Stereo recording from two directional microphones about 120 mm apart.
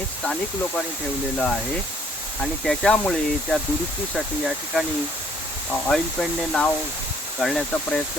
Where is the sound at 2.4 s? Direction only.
5° left (ahead or behind).